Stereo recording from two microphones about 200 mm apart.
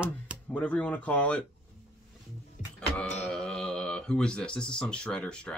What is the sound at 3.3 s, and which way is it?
Speech, 5° left (ahead or behind).